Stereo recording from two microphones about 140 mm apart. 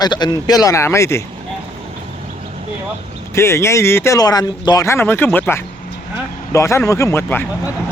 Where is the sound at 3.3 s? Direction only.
20° left (ahead or behind).